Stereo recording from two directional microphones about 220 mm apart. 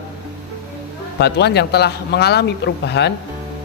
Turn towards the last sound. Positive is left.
turn(degrees=50)  # may be behind; listen again after turning